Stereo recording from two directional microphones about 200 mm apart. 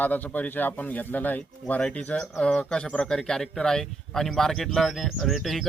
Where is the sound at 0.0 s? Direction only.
10° left (ahead or behind).